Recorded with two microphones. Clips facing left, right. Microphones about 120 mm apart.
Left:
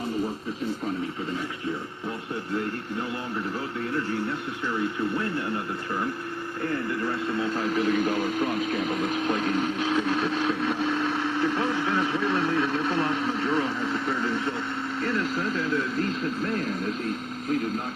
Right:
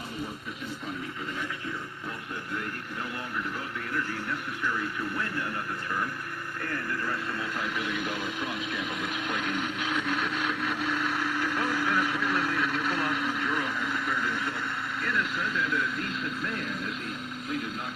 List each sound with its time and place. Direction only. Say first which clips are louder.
3.9 s speech: left 4 dB; 25° left (ahead or behind)
6.6 s speech: left 6 dB; 25° left (ahead or behind)